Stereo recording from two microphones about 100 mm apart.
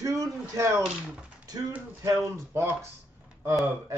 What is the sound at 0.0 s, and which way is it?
Speech, 35° right (ahead or behind).